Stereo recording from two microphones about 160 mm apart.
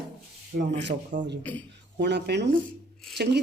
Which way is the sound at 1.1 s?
90° right.